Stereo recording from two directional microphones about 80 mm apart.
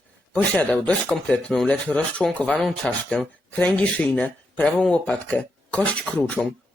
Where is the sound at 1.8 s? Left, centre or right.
Centre.